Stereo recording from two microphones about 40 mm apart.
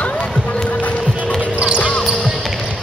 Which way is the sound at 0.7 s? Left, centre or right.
Left.